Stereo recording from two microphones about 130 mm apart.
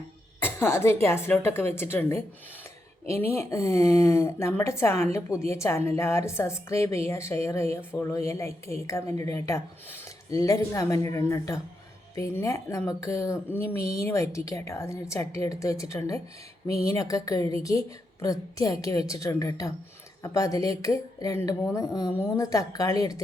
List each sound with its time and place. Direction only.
0.4 s a woman's voice: 20° left (ahead or behind)